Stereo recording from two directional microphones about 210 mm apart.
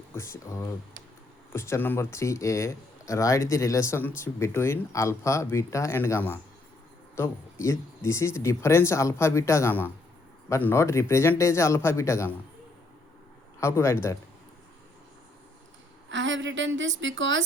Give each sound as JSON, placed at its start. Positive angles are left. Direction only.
{"t": 0.1, "sound": "speech", "side_deg": 10}
{"t": 13.6, "sound": "speech", "side_deg": 10}
{"t": 16.0, "sound": "a woman's voice", "side_deg": -60}